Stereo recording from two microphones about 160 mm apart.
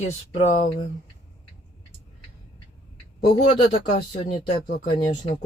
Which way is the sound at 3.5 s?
35° left (ahead or behind).